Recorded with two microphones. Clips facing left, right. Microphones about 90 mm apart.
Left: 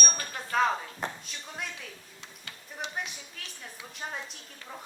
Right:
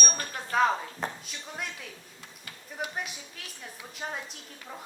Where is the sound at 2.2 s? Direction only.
20° left (ahead or behind).